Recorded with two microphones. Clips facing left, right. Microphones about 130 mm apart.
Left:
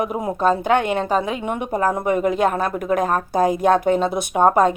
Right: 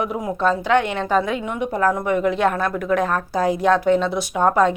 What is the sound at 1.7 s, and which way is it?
Speech, 20° left (ahead or behind).